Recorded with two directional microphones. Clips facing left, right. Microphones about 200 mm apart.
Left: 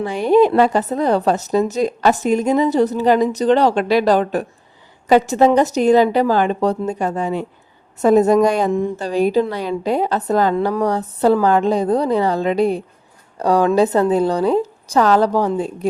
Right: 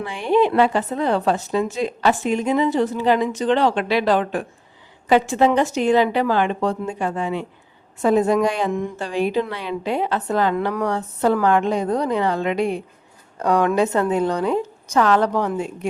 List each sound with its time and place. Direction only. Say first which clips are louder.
0.0 s a woman's voice: left 5 dB; 40° left (ahead or behind)